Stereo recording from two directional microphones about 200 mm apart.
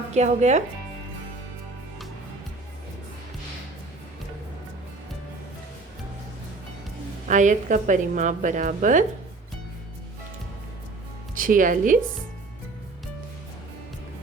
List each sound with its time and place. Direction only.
0.1 s a woman's voice: 35° right (ahead or behind)
7.3 s a woman's voice: 40° right (ahead or behind)
11.3 s speech: 45° right (ahead or behind)